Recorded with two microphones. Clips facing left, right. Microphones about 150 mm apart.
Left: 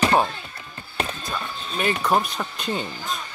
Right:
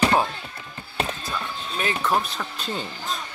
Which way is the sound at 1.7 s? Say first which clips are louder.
Left 3 dB; centre (ahead or behind).